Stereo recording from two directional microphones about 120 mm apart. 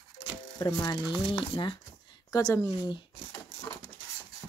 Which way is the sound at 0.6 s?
30° left (ahead or behind).